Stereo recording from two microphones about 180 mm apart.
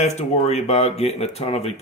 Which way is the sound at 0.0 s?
35° left (ahead or behind).